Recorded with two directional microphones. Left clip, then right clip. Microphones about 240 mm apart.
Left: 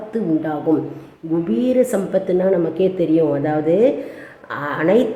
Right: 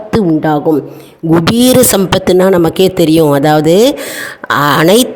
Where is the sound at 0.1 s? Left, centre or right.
Right.